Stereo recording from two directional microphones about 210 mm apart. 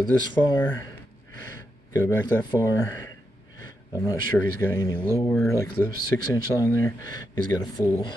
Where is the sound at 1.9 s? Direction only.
15° left (ahead or behind).